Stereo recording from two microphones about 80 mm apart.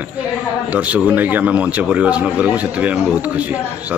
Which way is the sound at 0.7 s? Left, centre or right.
Centre.